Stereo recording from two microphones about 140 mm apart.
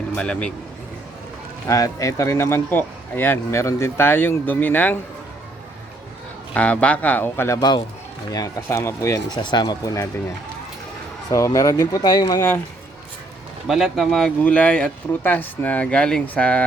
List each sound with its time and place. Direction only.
0.2 s speech: 5° left (ahead or behind)
1.6 s speech: 25° left (ahead or behind)
6.5 s speech: 10° left (ahead or behind)
7.6 s a man's voice: 30° left (ahead or behind)
11.3 s speech: 25° left (ahead or behind)
13.7 s speech: centre (ahead or behind)